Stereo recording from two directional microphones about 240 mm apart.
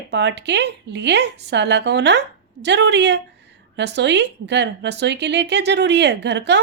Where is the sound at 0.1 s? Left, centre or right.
Right.